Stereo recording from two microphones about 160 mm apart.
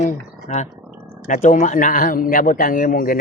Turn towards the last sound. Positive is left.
turn(degrees=60)  # may be behind; listen again after turning